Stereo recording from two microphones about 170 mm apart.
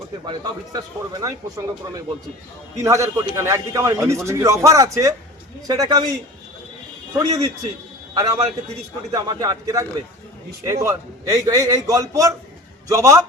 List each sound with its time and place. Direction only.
0.3 s a man's voice: 20° right (ahead or behind)
2.7 s a man's voice: 20° right (ahead or behind)
7.2 s a man's voice: 20° right (ahead or behind)